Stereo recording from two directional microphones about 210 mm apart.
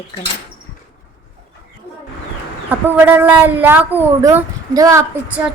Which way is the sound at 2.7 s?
10° right (ahead or behind).